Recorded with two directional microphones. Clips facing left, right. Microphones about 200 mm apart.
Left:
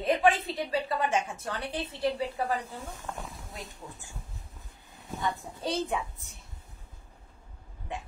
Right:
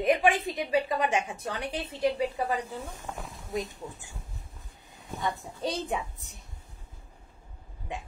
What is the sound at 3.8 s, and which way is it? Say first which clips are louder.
Speech: right 4 dB; 20° right (ahead or behind).